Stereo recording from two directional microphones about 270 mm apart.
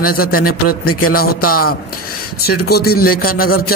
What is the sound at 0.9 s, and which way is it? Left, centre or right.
Music, left.